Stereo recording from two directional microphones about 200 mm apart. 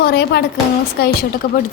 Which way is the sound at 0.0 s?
55° left (ahead or behind).